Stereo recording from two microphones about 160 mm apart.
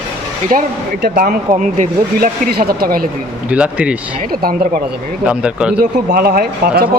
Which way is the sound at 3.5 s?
5° right (ahead or behind).